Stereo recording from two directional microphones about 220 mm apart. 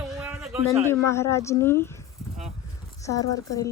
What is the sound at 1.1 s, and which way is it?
A woman's voice, 15° left (ahead or behind).